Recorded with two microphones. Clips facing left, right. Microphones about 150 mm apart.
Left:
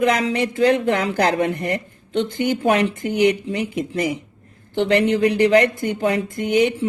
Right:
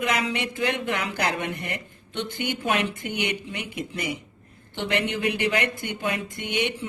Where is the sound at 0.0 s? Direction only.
35° left (ahead or behind).